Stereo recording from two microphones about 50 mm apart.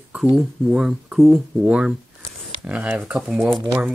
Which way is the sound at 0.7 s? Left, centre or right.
Centre.